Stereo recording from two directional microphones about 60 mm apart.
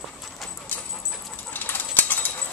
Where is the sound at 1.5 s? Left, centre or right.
Left.